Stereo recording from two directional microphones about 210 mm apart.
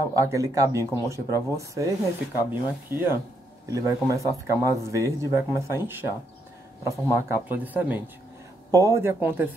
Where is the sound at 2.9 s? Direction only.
10° right (ahead or behind).